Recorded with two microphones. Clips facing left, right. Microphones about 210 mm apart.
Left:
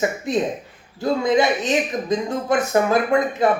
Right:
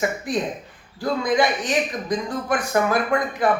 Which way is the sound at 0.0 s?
25° left (ahead or behind).